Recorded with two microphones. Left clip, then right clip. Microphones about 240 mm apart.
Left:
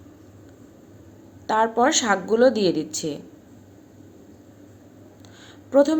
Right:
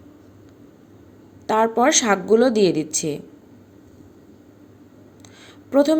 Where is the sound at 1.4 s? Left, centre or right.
Right.